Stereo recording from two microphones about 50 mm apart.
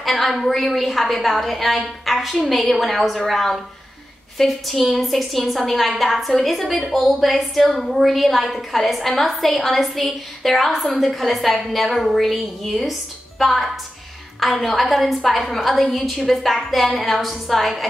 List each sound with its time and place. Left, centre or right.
0.0 s a woman's voice: centre